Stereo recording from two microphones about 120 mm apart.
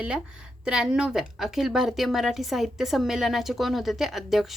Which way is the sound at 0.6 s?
5° right (ahead or behind).